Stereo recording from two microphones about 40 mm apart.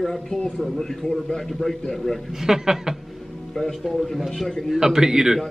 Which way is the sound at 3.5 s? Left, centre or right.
Centre.